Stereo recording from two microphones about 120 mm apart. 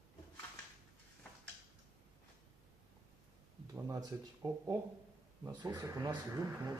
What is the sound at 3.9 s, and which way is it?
A man's voice, 30° right (ahead or behind).